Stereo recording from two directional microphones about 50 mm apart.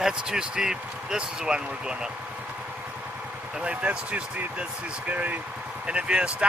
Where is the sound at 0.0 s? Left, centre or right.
Centre.